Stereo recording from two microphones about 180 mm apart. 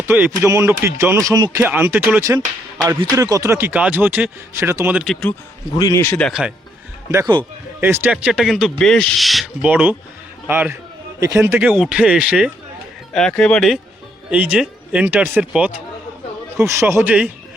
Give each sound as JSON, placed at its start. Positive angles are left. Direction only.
{"t": 0.1, "sound": "speech", "side_deg": -15}
{"t": 5.7, "sound": "speech", "side_deg": 20}
{"t": 7.1, "sound": "a man's voice", "side_deg": -15}